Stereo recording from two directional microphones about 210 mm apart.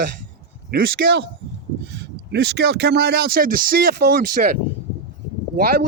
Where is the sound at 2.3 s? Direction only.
50° right (ahead or behind).